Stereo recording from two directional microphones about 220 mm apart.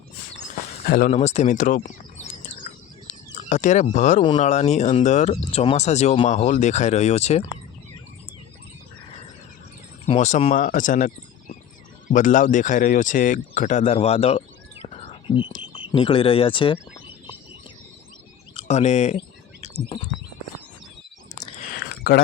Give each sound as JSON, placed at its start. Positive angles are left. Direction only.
{"t": 0.9, "sound": "speech", "side_deg": 40}
{"t": 1.1, "sound": "bird", "side_deg": 30}
{"t": 3.3, "sound": "speech", "side_deg": 35}
{"t": 10.1, "sound": "speech", "side_deg": 30}
{"t": 18.5, "sound": "speech", "side_deg": 30}
{"t": 19.6, "sound": "bird", "side_deg": 30}
{"t": 21.3, "sound": "a sound", "side_deg": 10}
{"t": 21.8, "sound": "a sound", "side_deg": 45}